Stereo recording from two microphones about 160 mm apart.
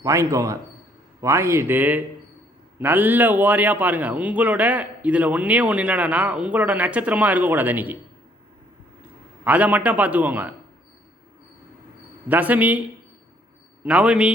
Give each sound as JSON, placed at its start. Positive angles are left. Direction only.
{"t": 0.0, "sound": "a man's voice", "side_deg": -20}
{"t": 9.4, "sound": "a man's voice", "side_deg": -10}
{"t": 12.3, "sound": "a man's voice", "side_deg": -10}
{"t": 13.8, "sound": "a man's voice", "side_deg": -5}